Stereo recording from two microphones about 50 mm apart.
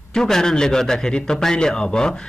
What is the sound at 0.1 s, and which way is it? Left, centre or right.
A man's voice, centre.